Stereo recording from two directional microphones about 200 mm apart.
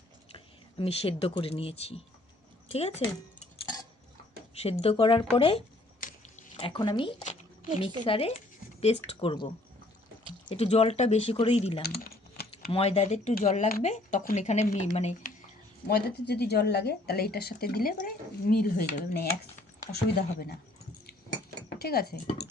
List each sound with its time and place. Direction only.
0.3 s speech: 30° left (ahead or behind)
4.6 s a woman's voice: 30° left (ahead or behind)
6.0 s a sound: 40° left (ahead or behind)
6.6 s a woman's voice: 25° left (ahead or behind)
10.5 s speech: 30° left (ahead or behind)
12.0 s typing: 50° left (ahead or behind)
12.7 s a woman's voice: 30° left (ahead or behind)
15.9 s speech: 55° left (ahead or behind)
21.8 s speech: 50° left (ahead or behind)